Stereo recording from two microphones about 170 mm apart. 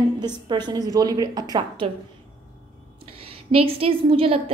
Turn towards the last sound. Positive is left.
turn(degrees=-35)  # may be behind; listen again after turning